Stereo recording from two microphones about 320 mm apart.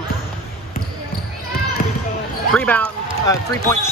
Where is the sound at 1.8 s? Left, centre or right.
Left.